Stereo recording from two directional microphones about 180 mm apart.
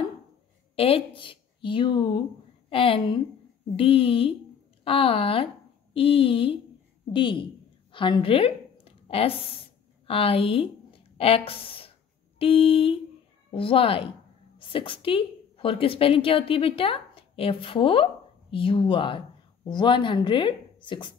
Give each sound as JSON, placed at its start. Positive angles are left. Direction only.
{"t": 0.7, "sound": "a woman's voice", "side_deg": 30}
{"t": 7.9, "sound": "a sound", "side_deg": 30}
{"t": 12.4, "sound": "a woman's voice", "side_deg": 30}